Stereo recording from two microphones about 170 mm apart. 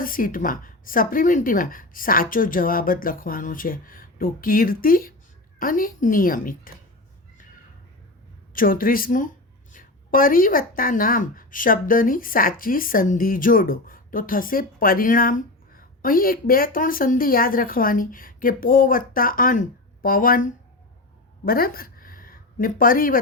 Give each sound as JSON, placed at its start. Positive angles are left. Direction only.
{"t": 0.0, "sound": "speech", "side_deg": 55}
{"t": 8.5, "sound": "speech", "side_deg": 55}